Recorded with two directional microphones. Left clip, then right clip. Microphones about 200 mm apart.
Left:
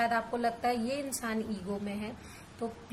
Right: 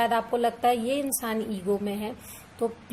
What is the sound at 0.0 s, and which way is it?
Speech, 30° right (ahead or behind).